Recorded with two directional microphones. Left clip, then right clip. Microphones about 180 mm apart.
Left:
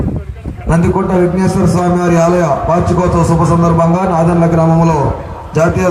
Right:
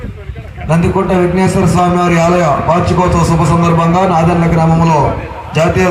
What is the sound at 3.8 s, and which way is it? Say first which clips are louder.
A man's voice: right 1 dB; 30° right (ahead or behind).